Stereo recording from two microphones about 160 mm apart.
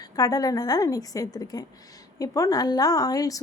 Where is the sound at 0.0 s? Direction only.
25° left (ahead or behind).